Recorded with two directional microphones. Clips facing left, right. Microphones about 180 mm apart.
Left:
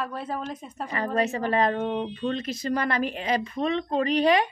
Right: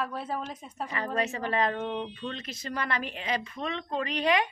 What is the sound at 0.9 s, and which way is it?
A woman's voice, 40° left (ahead or behind).